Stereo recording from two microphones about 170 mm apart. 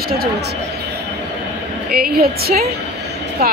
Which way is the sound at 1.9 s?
65° right (ahead or behind).